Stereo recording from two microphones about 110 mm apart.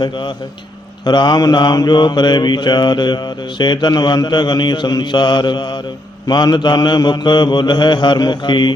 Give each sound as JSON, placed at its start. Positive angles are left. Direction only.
{"t": 0.0, "sound": "mantra", "side_deg": 45}